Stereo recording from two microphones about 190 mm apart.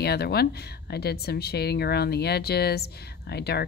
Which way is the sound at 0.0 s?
55° left (ahead or behind).